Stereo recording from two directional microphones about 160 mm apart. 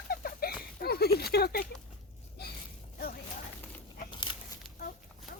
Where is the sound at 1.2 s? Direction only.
80° left.